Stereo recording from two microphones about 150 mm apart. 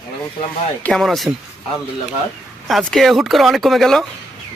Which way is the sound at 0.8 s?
Centre (ahead or behind).